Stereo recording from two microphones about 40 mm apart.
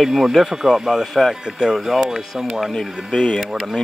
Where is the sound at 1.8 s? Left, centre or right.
Centre.